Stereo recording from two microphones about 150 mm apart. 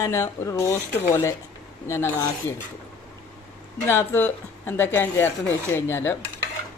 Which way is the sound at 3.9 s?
15° left (ahead or behind).